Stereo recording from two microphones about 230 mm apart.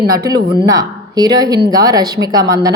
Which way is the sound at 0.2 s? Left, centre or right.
Centre.